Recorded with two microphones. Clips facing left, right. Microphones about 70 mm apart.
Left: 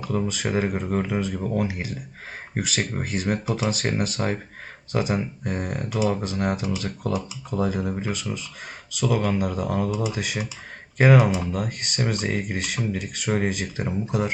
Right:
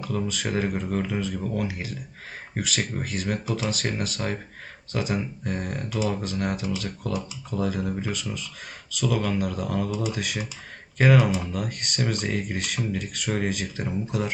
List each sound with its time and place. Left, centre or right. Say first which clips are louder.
0.0 s speech: left 3 dB; centre
0.9 s speech: left 2 dB; centre
4.2 s speech: left 3 dB; left
4.9 s speech: left 3 dB; centre